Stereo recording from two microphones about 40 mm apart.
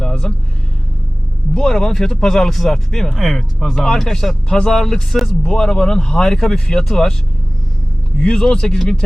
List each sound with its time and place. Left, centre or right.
0.0 s vehicle: centre
1.5 s speech: centre
5.1 s speech: centre
5.4 s speech: left
8.2 s speech: left